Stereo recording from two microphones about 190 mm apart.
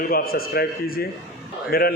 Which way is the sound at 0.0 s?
50° left (ahead or behind).